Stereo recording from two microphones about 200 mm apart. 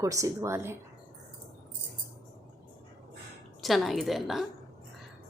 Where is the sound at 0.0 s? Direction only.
15° right (ahead or behind).